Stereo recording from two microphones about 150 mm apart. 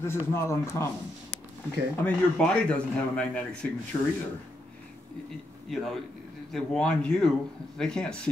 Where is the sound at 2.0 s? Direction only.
5° left (ahead or behind).